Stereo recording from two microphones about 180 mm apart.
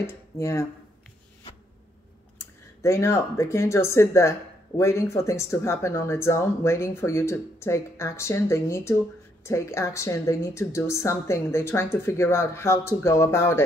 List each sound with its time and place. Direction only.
0.0 s speech: 15° left (ahead or behind)
2.3 s speech: 15° left (ahead or behind)